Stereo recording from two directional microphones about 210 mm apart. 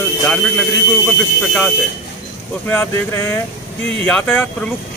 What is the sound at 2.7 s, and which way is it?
Speech, 10° left (ahead or behind).